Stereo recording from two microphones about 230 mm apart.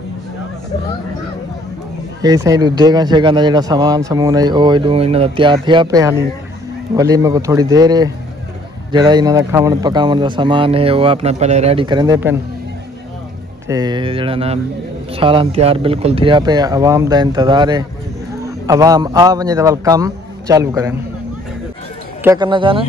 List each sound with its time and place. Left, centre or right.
2.2 s a man's voice: centre
13.7 s a man's voice: centre
22.2 s speech: centre